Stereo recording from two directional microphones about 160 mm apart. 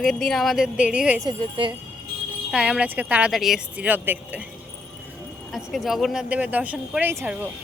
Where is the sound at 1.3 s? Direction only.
30° right (ahead or behind).